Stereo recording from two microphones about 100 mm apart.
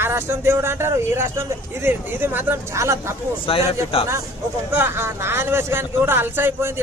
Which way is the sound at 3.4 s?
70° left (ahead or behind).